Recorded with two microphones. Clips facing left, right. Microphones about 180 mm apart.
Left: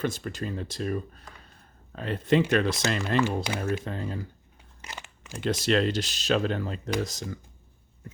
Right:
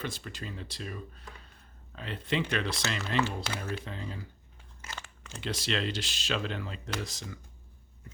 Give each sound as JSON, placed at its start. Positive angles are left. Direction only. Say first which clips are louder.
{"t": 0.0, "sound": "speech", "louder": "left 8 dB", "side_deg": 45}
{"t": 3.2, "sound": "speech", "louder": "left 3 dB", "side_deg": 15}
{"t": 3.8, "sound": "speech", "louder": "left 7 dB", "side_deg": 50}
{"t": 4.8, "sound": "crunch", "louder": "left 2 dB", "side_deg": 15}
{"t": 5.4, "sound": "speech", "louder": "left 8 dB", "side_deg": 45}